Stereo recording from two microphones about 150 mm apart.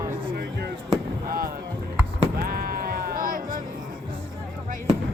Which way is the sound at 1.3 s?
75° right (ahead or behind).